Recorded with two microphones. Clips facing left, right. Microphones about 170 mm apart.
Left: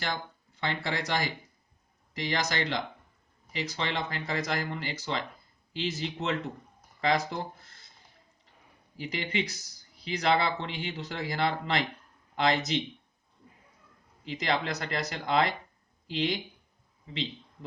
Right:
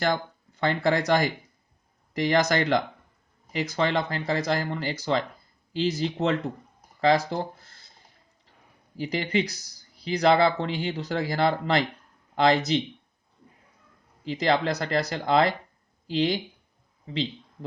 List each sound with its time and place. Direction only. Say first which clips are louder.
0.6 s speech: right 9 dB; 45° right (ahead or behind)
9.0 s speech: right 6 dB; 40° right (ahead or behind)
14.3 s speech: right 6 dB; 35° right (ahead or behind)